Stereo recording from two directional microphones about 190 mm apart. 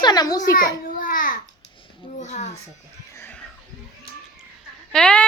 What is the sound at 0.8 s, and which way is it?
Babbling, 45° left (ahead or behind).